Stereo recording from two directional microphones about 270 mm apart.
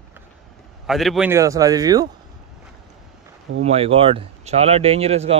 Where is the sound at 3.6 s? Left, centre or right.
Right.